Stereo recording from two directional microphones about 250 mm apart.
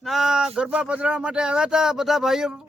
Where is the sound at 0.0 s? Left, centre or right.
Centre.